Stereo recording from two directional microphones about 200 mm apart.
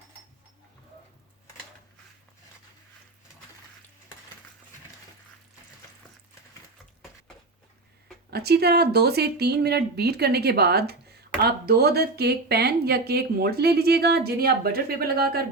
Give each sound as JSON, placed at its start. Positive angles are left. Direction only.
{"t": 8.3, "sound": "speech", "side_deg": -55}